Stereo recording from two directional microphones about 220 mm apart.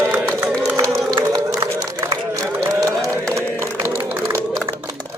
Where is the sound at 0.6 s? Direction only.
15° right (ahead or behind).